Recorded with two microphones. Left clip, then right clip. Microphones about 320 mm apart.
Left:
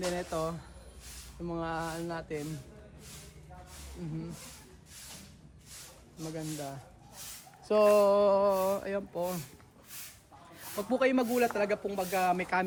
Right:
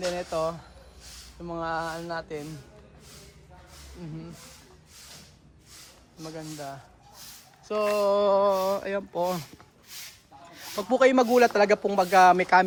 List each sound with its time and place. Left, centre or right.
0.0 s speech: centre
4.0 s speech: centre
6.3 s speech: centre
10.8 s speech: centre